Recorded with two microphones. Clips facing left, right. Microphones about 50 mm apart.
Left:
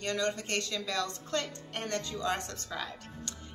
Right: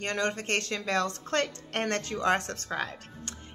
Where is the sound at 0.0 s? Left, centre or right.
Right.